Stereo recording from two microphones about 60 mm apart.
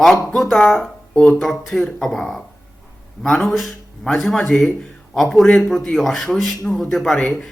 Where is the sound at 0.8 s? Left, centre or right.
Centre.